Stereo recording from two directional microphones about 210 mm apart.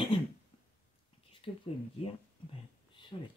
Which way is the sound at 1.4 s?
25° left (ahead or behind).